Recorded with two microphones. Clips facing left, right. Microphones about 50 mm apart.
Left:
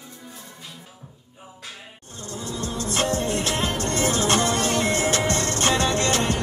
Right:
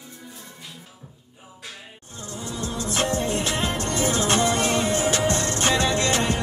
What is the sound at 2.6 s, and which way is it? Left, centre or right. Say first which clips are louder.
Music: even; left.